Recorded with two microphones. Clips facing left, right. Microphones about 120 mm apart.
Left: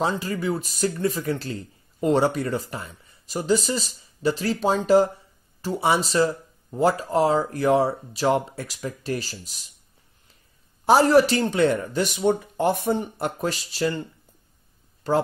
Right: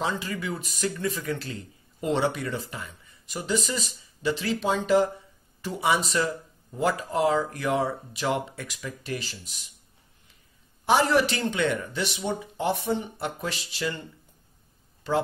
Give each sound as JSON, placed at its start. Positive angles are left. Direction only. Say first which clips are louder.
{"t": 0.0, "sound": "speech", "louder": "left 5 dB", "side_deg": 40}
{"t": 10.9, "sound": "speech", "louder": "left 6 dB", "side_deg": 40}
{"t": 15.0, "sound": "speech", "louder": "left 4 dB", "side_deg": 45}